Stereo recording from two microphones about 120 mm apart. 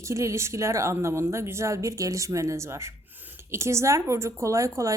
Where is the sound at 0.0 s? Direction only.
25° right (ahead or behind).